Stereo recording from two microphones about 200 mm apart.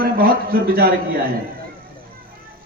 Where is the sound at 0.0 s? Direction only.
45° right (ahead or behind).